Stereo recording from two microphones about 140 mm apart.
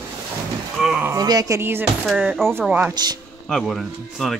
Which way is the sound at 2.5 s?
15° right (ahead or behind).